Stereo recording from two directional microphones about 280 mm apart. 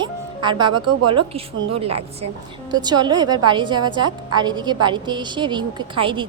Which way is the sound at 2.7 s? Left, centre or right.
Centre.